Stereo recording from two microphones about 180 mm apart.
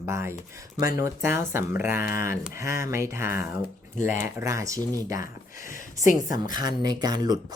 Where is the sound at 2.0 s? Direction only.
50° left (ahead or behind).